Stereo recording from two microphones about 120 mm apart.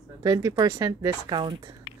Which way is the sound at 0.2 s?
35° right (ahead or behind).